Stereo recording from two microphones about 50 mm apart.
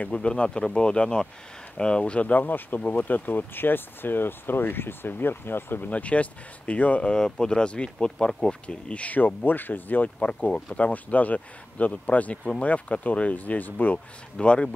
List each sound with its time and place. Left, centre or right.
0.0 s speech: left
2.4 s speech: left
5.9 s speech: left
10.1 s speech: centre
10.9 s speech: left
13.9 s speech: left